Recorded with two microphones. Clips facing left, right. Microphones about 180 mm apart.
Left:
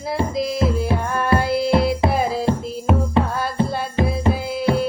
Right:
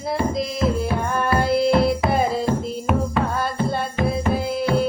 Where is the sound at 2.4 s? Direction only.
30° left (ahead or behind).